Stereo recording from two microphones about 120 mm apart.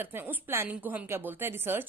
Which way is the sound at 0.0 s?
15° right (ahead or behind).